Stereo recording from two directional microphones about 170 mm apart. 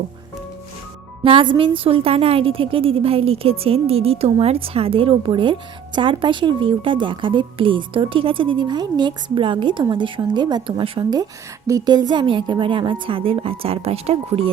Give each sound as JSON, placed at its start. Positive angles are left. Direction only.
{"t": 1.2, "sound": "a woman's voice", "side_deg": -30}